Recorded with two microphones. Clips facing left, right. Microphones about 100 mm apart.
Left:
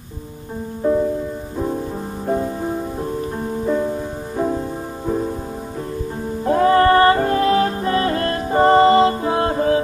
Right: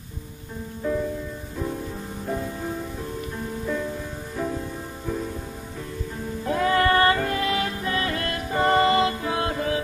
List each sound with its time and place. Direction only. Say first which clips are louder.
0.8 s music: left 8 dB; 40° left (ahead or behind)
2.2 s music: left 8 dB; 35° left (ahead or behind)
6.4 s music: left 8 dB; 35° left (ahead or behind)